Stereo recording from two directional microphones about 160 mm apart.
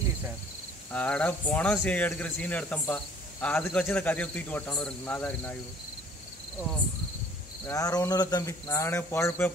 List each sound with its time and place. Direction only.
0.9 s speech: 10° left (ahead or behind)
7.6 s speech: 20° left (ahead or behind)